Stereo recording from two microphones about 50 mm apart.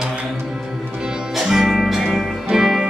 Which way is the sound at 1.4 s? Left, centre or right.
Centre.